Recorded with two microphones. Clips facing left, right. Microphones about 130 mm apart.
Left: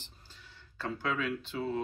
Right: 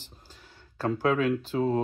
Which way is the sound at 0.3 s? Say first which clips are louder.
Right 4 dB; 45° right (ahead or behind).